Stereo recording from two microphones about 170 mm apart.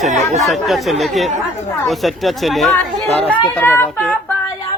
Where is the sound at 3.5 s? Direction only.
10° left (ahead or behind).